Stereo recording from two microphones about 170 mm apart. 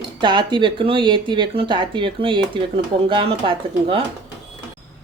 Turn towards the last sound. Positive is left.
turn(degrees=-35)  # may be behind; listen again after turning